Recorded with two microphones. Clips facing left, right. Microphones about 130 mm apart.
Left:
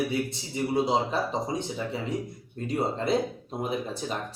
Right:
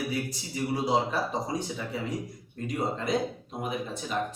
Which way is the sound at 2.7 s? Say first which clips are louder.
Left 3 dB; 30° left (ahead or behind).